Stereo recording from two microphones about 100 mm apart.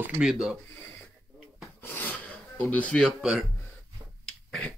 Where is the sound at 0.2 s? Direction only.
10° right (ahead or behind).